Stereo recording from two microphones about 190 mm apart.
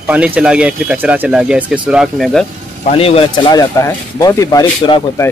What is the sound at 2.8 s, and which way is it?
Speech, 30° left (ahead or behind).